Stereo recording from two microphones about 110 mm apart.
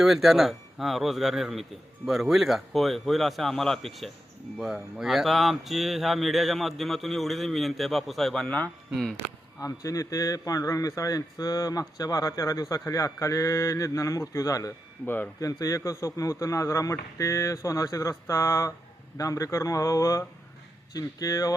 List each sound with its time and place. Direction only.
0.0 s speech: centre (ahead or behind)
9.6 s a man's voice: 30° left (ahead or behind)
15.0 s speech: 20° left (ahead or behind)
15.4 s a man's voice: 30° left (ahead or behind)